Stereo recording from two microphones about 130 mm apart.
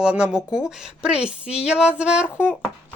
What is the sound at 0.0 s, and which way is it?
Speech, 5° right (ahead or behind).